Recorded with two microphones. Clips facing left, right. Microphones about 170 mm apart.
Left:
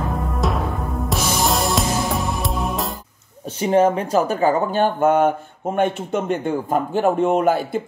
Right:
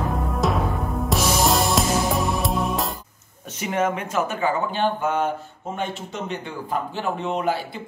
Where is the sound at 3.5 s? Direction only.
35° left (ahead or behind); by 7.8 s 50° left (ahead or behind).